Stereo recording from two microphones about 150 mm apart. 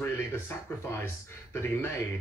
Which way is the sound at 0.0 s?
15° left (ahead or behind).